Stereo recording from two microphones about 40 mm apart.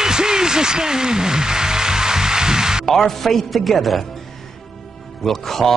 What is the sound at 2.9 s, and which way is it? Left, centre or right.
Speech, centre.